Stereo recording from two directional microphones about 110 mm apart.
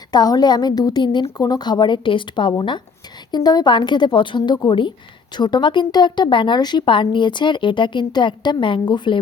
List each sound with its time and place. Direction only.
0.1 s a woman's voice: 40° left (ahead or behind)